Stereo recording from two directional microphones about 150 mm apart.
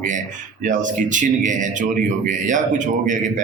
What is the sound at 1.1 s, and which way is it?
A man's voice, 55° right (ahead or behind).